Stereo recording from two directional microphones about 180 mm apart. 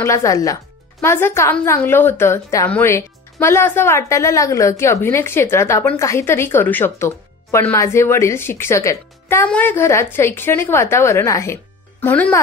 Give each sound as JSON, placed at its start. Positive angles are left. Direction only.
{"t": 0.0, "sound": "a woman's voice", "side_deg": 15}